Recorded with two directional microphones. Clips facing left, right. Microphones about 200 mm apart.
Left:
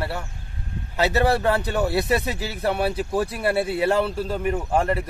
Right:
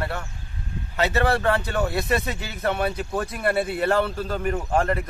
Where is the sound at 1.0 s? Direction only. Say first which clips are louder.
Left 2 dB; 35° left (ahead or behind).